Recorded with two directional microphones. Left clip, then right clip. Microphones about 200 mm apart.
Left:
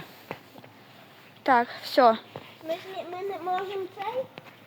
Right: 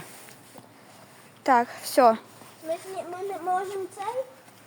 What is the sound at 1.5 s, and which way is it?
Speech, 20° right (ahead or behind).